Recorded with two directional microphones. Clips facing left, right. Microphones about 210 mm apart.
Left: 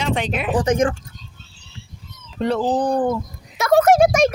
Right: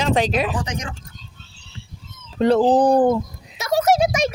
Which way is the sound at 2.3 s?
35° right (ahead or behind).